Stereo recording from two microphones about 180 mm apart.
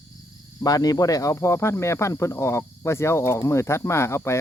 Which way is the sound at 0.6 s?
20° left (ahead or behind).